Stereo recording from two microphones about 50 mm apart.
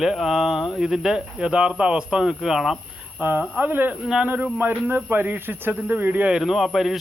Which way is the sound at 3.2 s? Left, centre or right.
Right.